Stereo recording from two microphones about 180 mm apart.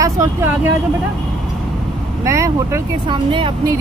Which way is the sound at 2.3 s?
15° right (ahead or behind).